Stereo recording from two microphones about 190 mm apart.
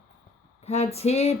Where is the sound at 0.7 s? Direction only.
35° left (ahead or behind).